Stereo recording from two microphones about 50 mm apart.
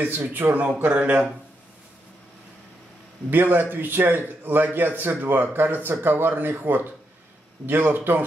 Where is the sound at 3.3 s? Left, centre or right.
Right.